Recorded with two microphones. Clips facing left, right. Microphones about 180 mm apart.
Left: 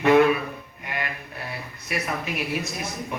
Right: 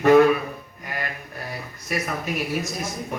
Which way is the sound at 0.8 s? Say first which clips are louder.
Even; 40° right (ahead or behind).